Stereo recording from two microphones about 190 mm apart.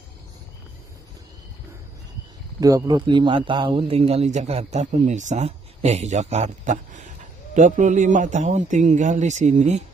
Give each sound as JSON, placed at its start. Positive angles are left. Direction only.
{"t": 2.6, "sound": "a man's voice", "side_deg": -20}